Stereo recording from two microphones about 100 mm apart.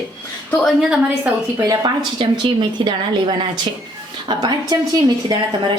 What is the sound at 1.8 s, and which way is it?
Speech, 45° right (ahead or behind).